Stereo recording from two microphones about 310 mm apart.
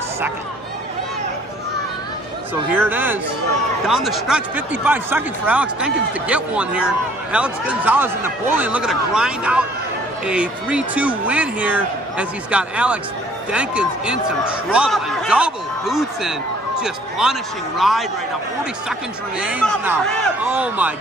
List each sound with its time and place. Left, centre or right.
2.7 s a man's voice: centre
19.4 s speech: centre